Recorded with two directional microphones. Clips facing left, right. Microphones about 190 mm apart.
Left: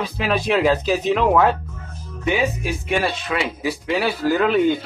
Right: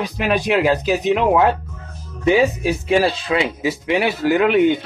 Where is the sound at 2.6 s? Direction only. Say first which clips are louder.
Right 5 dB; 35° right (ahead or behind).